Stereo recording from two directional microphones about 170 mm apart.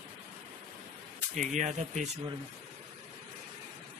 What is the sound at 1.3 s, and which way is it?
Speech, 45° right (ahead or behind).